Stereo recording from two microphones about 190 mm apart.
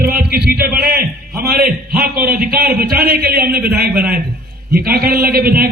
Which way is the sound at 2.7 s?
55° right (ahead or behind).